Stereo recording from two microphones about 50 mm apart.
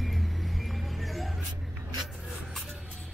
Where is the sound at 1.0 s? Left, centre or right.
Centre.